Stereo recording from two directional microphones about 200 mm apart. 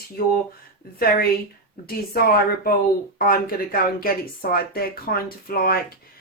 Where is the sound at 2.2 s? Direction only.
50° left (ahead or behind).